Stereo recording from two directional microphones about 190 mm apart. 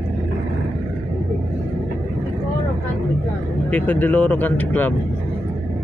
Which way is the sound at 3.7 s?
10° left (ahead or behind).